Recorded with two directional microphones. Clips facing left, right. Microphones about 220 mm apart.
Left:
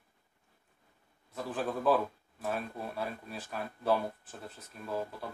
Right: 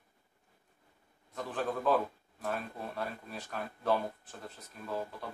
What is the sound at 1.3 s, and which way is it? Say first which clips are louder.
A man's voice: left 1 dB; 5° left (ahead or behind).